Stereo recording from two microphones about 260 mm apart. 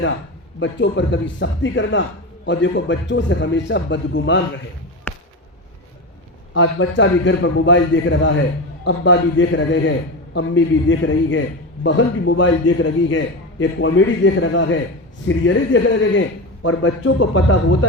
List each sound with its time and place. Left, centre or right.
0.6 s a man's voice: left
5.1 s basketball bounce: centre
6.5 s a man's voice: left